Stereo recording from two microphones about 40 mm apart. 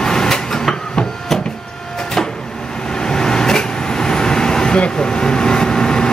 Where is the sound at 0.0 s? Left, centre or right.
Centre.